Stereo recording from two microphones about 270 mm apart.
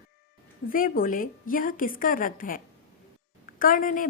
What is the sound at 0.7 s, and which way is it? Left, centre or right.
A woman's voice, left.